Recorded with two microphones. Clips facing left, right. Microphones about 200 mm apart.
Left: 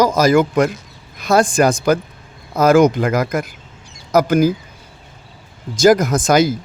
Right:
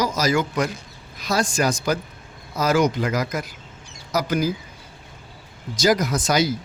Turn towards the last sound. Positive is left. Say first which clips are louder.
# left 7 dB
turn(degrees=50)  # may be behind; listen again after turning